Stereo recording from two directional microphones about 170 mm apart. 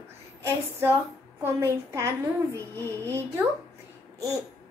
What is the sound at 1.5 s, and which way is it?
Speech, 15° right (ahead or behind).